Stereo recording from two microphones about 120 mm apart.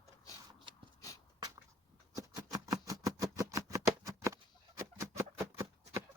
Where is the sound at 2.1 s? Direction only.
30° right (ahead or behind).